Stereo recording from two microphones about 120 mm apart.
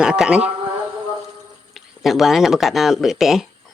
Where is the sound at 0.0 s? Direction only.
5° right (ahead or behind).